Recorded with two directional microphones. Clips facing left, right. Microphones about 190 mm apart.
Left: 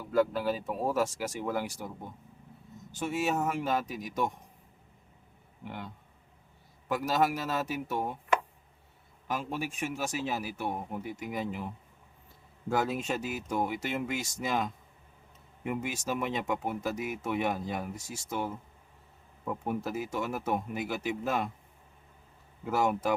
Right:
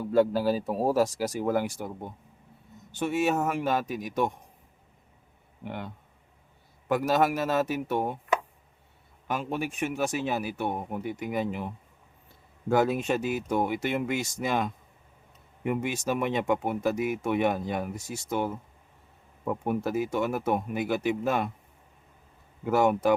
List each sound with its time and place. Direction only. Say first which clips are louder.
0.0 s speech: right 4 dB; 30° right (ahead or behind); by 1.9 s 50° right (ahead or behind)
2.9 s speech: right 4 dB; 60° right (ahead or behind)
5.6 s speech: right 4 dB; 55° right (ahead or behind)
9.2 s speech: right 4 dB; 60° right (ahead or behind)
12.6 s speech: right 6 dB; 60° right (ahead or behind)
19.6 s speech: right 6 dB; 60° right (ahead or behind)
22.7 s speech: right 6 dB; 60° right (ahead or behind)